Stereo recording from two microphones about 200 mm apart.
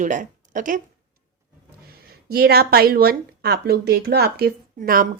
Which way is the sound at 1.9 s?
50° right (ahead or behind).